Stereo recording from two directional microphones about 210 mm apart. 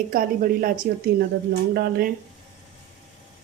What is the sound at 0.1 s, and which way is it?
A woman's voice, 45° right (ahead or behind).